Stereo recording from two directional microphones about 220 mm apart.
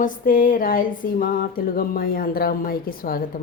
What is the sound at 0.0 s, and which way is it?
Music, 40° left (ahead or behind).